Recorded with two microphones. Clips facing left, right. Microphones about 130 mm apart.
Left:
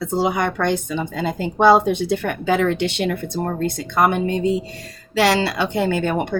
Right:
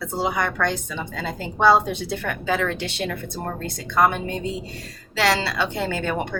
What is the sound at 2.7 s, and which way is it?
Speech, 65° left (ahead or behind).